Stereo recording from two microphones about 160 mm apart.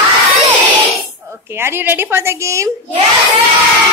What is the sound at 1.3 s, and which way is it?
A woman's voice, 15° right (ahead or behind).